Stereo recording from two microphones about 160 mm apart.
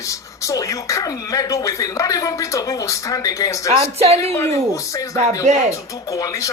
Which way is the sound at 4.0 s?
40° right (ahead or behind).